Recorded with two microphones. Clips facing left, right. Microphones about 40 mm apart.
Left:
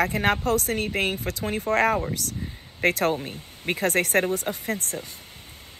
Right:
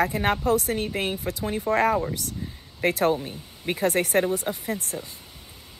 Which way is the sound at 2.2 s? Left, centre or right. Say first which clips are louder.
Left 1 dB; left.